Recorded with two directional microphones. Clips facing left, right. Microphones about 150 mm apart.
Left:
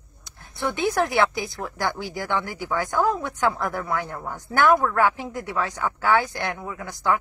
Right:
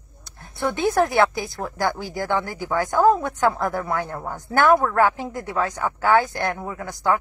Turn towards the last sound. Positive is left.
turn(degrees=-45)  # may be behind; listen again after turning